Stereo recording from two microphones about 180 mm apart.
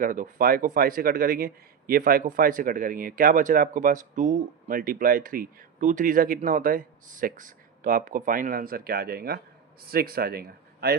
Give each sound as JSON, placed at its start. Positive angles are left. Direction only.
{"t": 0.0, "sound": "a man's voice", "side_deg": -50}